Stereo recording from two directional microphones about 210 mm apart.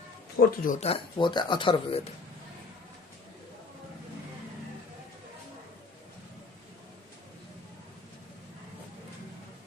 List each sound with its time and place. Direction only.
0.3 s speech: 40° left (ahead or behind); by 2.0 s 25° left (ahead or behind)